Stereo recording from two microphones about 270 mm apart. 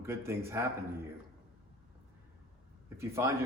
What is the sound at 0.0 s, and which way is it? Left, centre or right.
Speech, centre.